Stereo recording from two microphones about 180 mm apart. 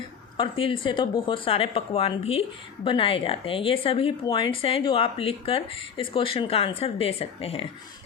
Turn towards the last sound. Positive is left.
turn(degrees=35)  # may be behind; listen again after turning